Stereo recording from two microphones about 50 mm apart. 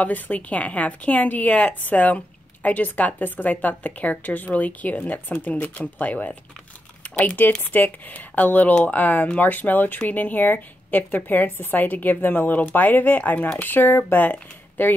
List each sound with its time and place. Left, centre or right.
0.0 s a woman's voice: left
7.0 s typing: left
7.7 s speech: left